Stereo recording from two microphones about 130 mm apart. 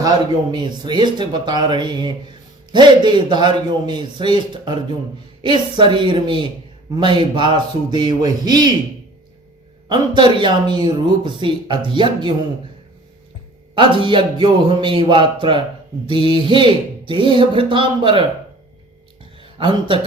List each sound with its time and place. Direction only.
0.5 s speech: 35° right (ahead or behind)
9.9 s speech: 35° right (ahead or behind)
13.7 s speech: 40° right (ahead or behind)
19.4 s speech: 40° right (ahead or behind)